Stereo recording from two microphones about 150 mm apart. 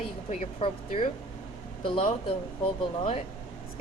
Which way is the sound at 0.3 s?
50° left (ahead or behind).